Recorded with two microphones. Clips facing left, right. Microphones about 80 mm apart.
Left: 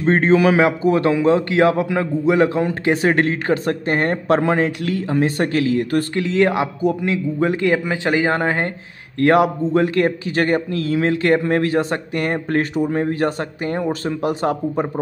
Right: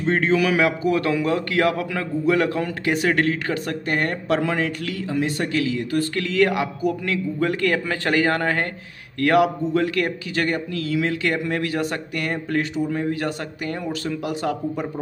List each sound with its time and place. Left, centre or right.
0.0 s a man's voice: left
6.1 s a man's voice: left